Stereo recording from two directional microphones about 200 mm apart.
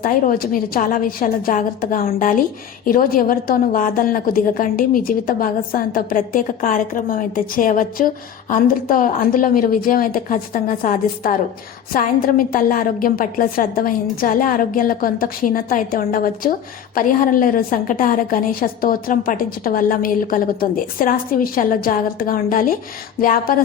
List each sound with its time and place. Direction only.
0.0 s a woman's voice: 45° left (ahead or behind)